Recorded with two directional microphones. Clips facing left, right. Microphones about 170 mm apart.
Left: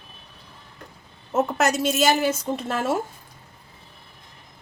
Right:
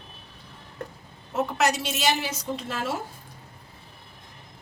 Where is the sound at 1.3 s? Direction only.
45° left (ahead or behind).